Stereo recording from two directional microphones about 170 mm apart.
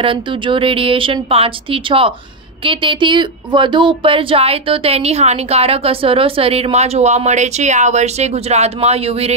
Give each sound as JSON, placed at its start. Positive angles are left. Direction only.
{"t": 0.0, "sound": "speech", "side_deg": -30}